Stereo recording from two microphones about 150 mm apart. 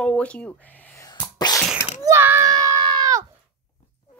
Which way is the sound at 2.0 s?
15° right (ahead or behind).